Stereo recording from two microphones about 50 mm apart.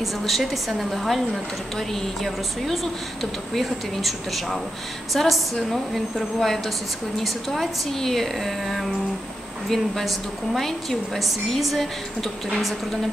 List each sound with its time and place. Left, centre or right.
0.0 s a woman's voice: centre